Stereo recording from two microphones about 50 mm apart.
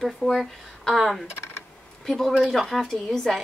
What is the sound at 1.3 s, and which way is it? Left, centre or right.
Typing, left.